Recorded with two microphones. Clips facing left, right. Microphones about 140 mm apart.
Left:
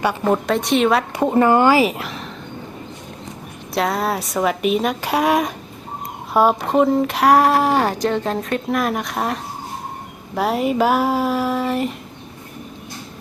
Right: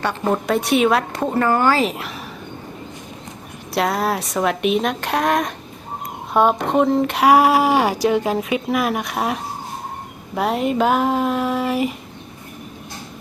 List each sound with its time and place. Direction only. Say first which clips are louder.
0.0 s a woman's voice: left 2 dB; 10° left (ahead or behind)
0.4 s speech: right 3 dB; 5° right (ahead or behind)
1.1 s speech: left 4 dB; 15° left (ahead or behind)
1.8 s speech: left 3 dB; centre (ahead or behind)
3.8 s speech: even; centre (ahead or behind)